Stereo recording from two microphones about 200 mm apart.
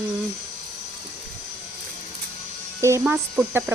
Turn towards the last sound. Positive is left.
turn(degrees=-5)  # may be behind; listen again after turning